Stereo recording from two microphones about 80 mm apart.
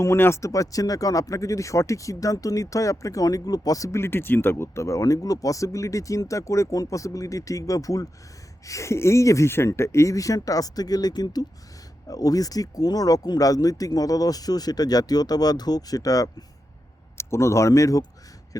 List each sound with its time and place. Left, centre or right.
0.0 s speech: left
17.2 s speech: left